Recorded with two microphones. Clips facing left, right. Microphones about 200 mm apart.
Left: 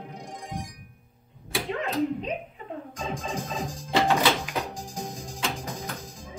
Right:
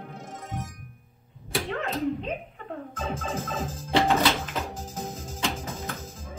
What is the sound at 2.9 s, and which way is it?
Music, 15° left (ahead or behind).